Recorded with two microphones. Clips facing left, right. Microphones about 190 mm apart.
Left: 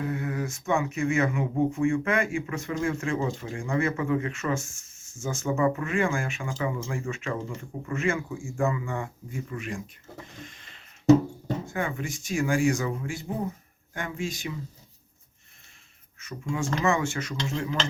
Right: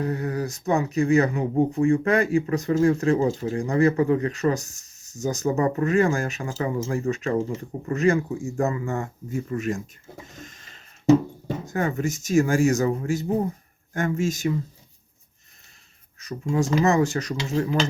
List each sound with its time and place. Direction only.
0.0 s speech: 35° right (ahead or behind)
10.3 s a sound: 45° right (ahead or behind)
11.6 s speech: 40° right (ahead or behind)
16.1 s speech: 40° right (ahead or behind)